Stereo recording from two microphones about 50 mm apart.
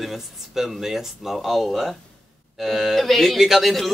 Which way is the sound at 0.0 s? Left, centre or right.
Centre.